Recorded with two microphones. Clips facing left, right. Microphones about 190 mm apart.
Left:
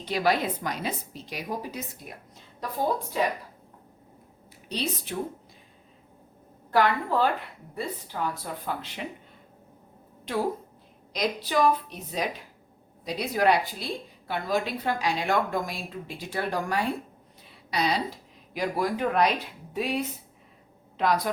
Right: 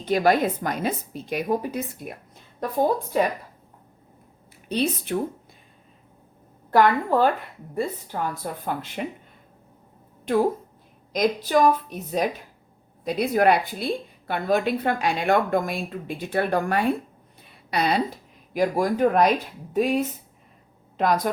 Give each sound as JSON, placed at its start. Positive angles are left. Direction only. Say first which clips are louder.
{"t": 0.0, "sound": "a woman's voice", "louder": "right 5 dB", "side_deg": -50}
{"t": 3.1, "sound": "a woman's voice", "louder": "right 5 dB", "side_deg": -50}
{"t": 4.7, "sound": "a woman's voice", "louder": "right 7 dB", "side_deg": -55}
{"t": 6.7, "sound": "a woman's voice", "louder": "right 5 dB", "side_deg": -50}
{"t": 10.3, "sound": "a woman's voice", "louder": "right 7 dB", "side_deg": -50}
{"t": 17.4, "sound": "a sound", "louder": "right 3 dB", "side_deg": -55}
{"t": 18.5, "sound": "a woman's voice", "louder": "right 6 dB", "side_deg": -45}